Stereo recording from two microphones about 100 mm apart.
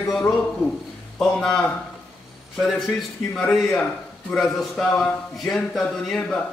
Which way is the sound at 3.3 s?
Centre (ahead or behind).